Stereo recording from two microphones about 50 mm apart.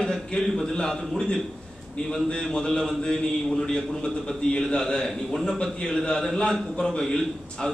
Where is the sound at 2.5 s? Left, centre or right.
Centre.